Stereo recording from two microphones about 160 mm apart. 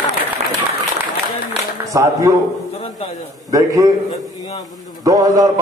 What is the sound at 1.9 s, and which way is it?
Speech, 20° right (ahead or behind).